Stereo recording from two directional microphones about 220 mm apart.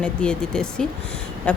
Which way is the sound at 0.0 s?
5° left (ahead or behind).